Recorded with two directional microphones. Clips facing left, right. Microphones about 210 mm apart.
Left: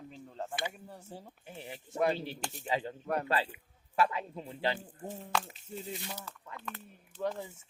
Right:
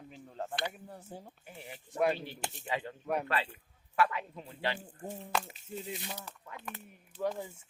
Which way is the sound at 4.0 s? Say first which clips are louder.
Even; 25° left (ahead or behind).